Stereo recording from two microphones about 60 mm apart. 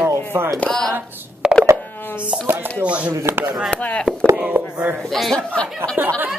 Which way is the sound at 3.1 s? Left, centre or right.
Right.